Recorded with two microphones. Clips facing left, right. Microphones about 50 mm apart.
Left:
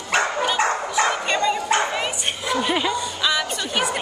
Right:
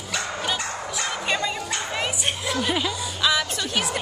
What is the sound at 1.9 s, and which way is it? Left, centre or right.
A woman's voice, centre.